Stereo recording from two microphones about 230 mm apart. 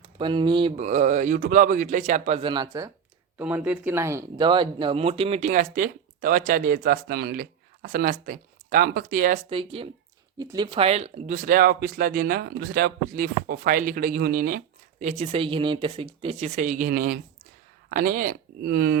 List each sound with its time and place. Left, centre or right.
0.2 s speech: right
3.3 s speech: centre; by 9.4 s right
9.5 s speech: right